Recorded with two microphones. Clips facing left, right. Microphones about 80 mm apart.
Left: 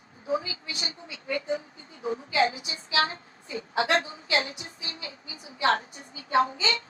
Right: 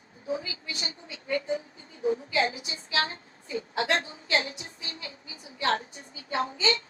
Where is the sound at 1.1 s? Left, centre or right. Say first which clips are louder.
Right 2 dB; right.